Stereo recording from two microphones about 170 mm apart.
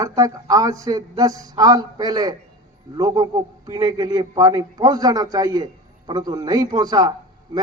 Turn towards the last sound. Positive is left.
turn(degrees=-25)  # may be behind; listen again after turning